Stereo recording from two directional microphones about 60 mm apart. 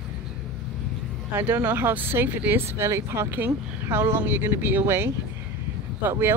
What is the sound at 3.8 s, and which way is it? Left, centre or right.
Speech, right.